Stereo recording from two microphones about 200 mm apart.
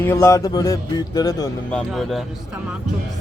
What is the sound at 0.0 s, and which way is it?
Speech, 10° left (ahead or behind).